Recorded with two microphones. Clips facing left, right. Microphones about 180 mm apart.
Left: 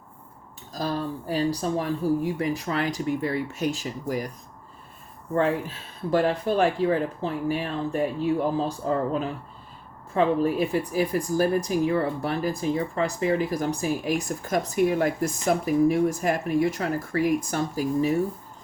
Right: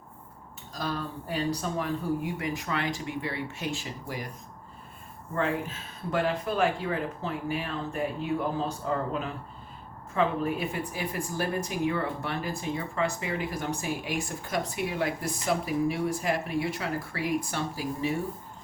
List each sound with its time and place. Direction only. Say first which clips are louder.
0.7 s speech: left 5 dB; 35° left (ahead or behind)
5.3 s speech: left 5 dB; 35° left (ahead or behind)